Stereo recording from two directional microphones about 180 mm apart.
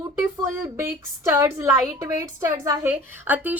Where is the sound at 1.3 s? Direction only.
15° right (ahead or behind).